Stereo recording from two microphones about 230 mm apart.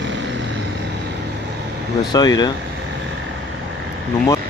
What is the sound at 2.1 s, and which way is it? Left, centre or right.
Speech, centre.